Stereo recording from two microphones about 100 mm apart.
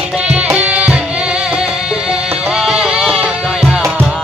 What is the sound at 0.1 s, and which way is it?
Tabla, 5° right (ahead or behind).